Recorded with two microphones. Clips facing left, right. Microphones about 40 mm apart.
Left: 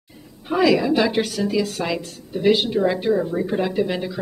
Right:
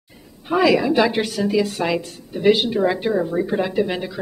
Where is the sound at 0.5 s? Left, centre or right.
Centre.